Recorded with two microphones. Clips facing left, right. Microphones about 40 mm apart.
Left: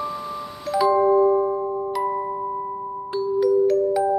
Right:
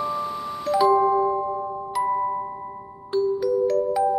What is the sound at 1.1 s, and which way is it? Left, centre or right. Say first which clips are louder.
Music: left 4 dB; centre.